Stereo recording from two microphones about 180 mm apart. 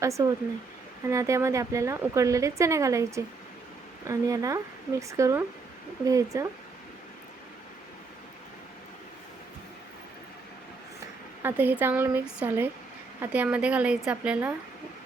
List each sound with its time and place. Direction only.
0.0 s speech: 15° right (ahead or behind)
11.4 s speech: 10° right (ahead or behind)